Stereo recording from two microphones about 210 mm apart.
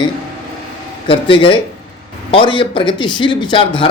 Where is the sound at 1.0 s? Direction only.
25° left (ahead or behind).